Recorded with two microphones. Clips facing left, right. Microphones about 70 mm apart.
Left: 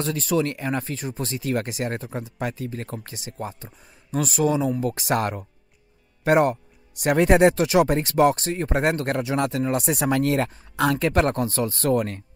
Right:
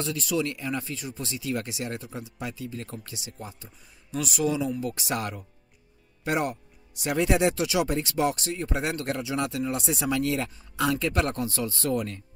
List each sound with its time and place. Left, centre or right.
0.0 s speech: left